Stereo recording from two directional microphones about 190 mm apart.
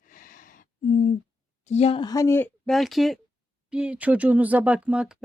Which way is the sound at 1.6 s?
35° left (ahead or behind).